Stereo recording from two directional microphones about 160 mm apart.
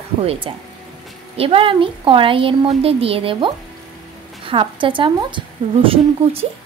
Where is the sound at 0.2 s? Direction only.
35° right (ahead or behind).